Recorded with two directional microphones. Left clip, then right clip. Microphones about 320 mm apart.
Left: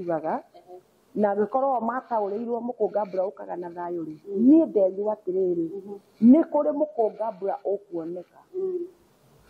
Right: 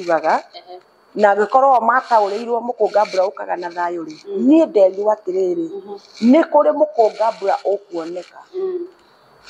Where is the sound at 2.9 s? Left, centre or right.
Centre.